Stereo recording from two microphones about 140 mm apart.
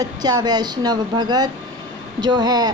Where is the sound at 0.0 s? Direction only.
30° right (ahead or behind).